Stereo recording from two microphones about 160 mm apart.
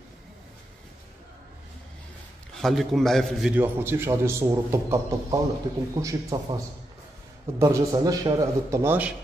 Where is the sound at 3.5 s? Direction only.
15° right (ahead or behind).